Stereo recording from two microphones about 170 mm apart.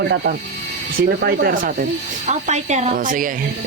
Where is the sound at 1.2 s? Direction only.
60° right (ahead or behind).